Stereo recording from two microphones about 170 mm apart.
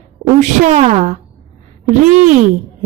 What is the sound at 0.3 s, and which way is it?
Speech, 45° right (ahead or behind).